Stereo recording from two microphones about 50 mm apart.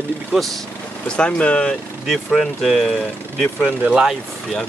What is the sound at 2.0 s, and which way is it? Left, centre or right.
Speech, centre.